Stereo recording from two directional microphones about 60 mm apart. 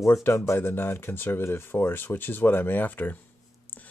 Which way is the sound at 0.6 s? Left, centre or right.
Left.